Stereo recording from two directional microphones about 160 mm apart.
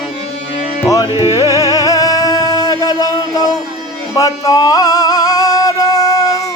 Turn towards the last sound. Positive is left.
turn(degrees=20)  # may be behind; listen again after turning